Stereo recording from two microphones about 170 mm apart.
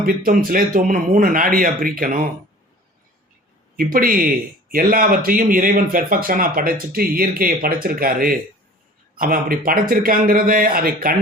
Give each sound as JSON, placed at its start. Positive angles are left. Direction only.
{"t": 0.0, "sound": "speech", "side_deg": -60}
{"t": 3.8, "sound": "speech", "side_deg": -55}